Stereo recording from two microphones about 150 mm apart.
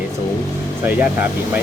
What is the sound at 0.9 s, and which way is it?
Speech, 10° right (ahead or behind).